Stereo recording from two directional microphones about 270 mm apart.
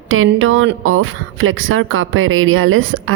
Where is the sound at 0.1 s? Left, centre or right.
Right.